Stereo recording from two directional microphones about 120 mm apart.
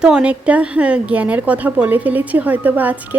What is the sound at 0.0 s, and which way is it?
A woman's voice, 10° right (ahead or behind).